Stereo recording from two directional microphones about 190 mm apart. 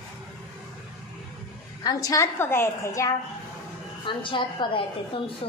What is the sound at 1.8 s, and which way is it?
A woman's voice, 20° left (ahead or behind).